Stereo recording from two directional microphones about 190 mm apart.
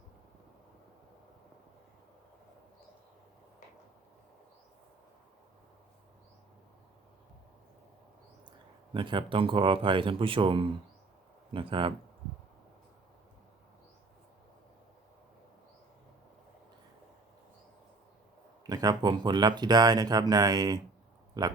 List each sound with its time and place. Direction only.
8.9 s speech: 25° right (ahead or behind)
18.7 s speech: 20° right (ahead or behind)